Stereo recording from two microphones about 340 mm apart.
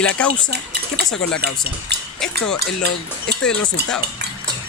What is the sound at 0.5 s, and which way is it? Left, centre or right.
Speech, right.